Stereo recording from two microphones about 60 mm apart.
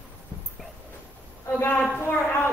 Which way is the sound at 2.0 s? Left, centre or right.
Left.